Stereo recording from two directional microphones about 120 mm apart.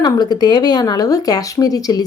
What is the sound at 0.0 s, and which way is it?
A woman's voice, 35° left (ahead or behind).